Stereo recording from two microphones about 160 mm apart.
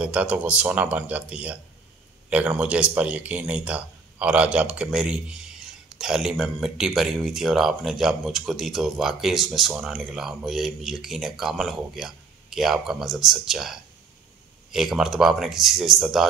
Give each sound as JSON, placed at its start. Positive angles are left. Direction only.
{"t": 0.0, "sound": "a man's voice", "side_deg": -10}